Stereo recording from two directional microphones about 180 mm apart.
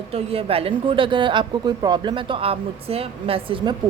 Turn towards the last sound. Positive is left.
turn(degrees=-25)  # may be behind; listen again after turning